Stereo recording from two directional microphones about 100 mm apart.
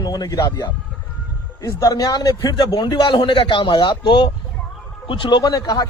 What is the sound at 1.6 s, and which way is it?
A man's voice, 40° left (ahead or behind).